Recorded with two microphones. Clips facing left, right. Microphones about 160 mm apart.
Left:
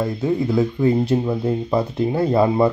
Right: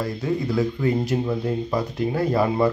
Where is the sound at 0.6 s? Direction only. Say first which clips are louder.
Left 5 dB; 25° left (ahead or behind).